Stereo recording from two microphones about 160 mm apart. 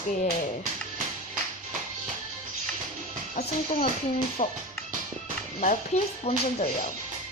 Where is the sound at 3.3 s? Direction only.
65° left (ahead or behind).